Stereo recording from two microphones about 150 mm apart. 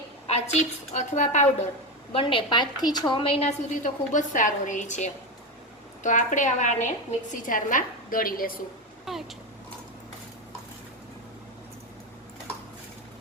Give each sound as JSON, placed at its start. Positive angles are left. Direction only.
{"t": 0.3, "sound": "a sound", "side_deg": 45}
{"t": 0.9, "sound": "a woman's voice", "side_deg": 55}
{"t": 2.1, "sound": "a woman's voice", "side_deg": 35}
{"t": 9.1, "sound": "speech", "side_deg": 0}